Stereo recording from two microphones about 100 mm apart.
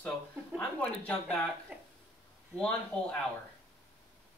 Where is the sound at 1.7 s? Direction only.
10° right (ahead or behind).